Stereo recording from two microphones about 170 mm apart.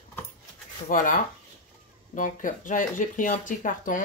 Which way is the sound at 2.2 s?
50° left (ahead or behind).